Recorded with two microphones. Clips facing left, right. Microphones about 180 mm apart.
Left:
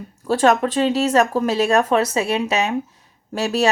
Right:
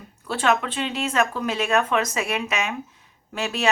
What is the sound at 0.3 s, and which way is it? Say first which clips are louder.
Speech: left 6 dB; 40° left (ahead or behind).